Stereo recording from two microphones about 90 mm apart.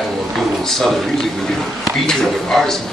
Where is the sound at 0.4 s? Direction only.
Centre (ahead or behind).